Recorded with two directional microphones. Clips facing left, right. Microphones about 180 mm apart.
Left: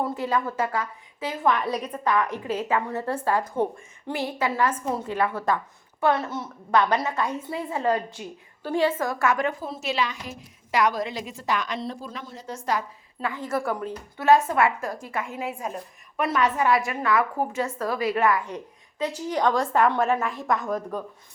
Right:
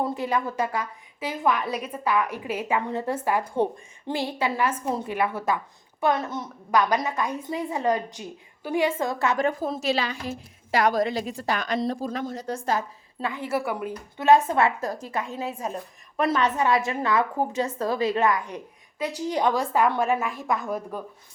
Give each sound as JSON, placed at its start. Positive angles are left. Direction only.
{"t": 0.1, "sound": "a woman's voice", "side_deg": -15}
{"t": 4.0, "sound": "a woman's voice", "side_deg": -30}
{"t": 5.0, "sound": "a woman's voice", "side_deg": -15}
{"t": 9.4, "sound": "a woman's voice", "side_deg": -40}
{"t": 12.5, "sound": "a woman's voice", "side_deg": -25}
{"t": 13.2, "sound": "a woman's voice", "side_deg": -15}
{"t": 15.4, "sound": "a woman's voice", "side_deg": -35}
{"t": 16.1, "sound": "a woman's voice", "side_deg": -25}
{"t": 19.5, "sound": "a woman's voice", "side_deg": 0}